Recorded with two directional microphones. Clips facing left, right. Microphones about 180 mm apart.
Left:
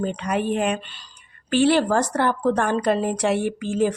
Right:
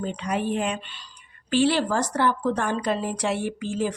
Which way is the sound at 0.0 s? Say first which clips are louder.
Left 3 dB; 55° left (ahead or behind).